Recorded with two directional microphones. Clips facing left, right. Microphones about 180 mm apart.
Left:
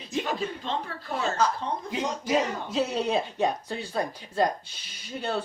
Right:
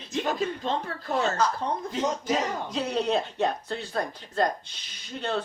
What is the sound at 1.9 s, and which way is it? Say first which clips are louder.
Speech: left 2 dB; 10° left (ahead or behind).